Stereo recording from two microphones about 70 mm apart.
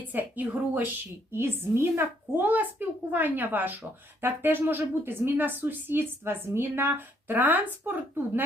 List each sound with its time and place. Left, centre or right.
0.0 s a woman's voice: right
1.3 s a woman's voice: right